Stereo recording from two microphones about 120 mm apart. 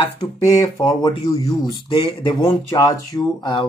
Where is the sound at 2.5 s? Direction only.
25° left (ahead or behind).